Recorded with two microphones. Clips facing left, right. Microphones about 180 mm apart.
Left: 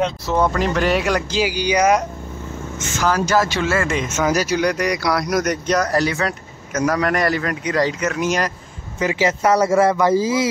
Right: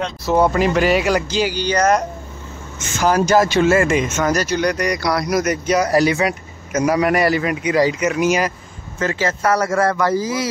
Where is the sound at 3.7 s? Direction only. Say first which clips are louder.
Right 5 dB; 15° right (ahead or behind).